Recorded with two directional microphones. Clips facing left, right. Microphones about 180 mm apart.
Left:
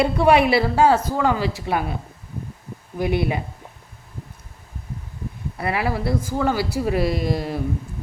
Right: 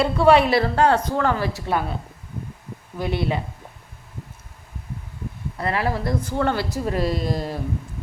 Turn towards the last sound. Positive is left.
turn(degrees=10)  # may be behind; listen again after turning